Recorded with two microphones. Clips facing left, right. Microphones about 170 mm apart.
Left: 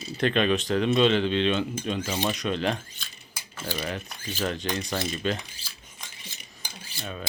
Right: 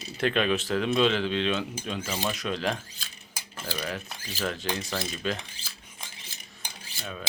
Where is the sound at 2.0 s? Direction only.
20° left (ahead or behind).